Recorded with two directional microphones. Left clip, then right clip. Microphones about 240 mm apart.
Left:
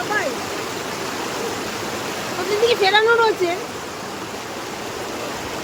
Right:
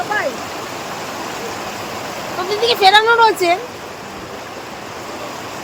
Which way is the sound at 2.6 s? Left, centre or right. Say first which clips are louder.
Right 5 dB; right.